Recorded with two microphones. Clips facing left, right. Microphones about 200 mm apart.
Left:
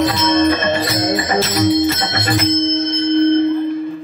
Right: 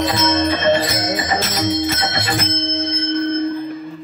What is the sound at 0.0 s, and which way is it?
Music, 55° left (ahead or behind).